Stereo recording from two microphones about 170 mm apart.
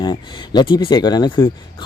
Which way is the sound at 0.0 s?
30° left (ahead or behind).